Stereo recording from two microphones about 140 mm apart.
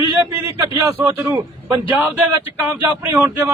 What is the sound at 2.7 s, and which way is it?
Speech, 20° right (ahead or behind).